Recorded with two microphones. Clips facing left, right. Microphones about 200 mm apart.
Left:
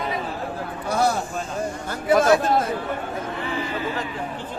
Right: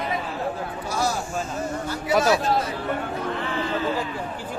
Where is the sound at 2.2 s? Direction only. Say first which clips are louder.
Left 3 dB; 50° left (ahead or behind).